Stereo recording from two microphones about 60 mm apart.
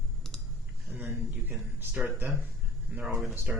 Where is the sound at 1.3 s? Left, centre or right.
Right.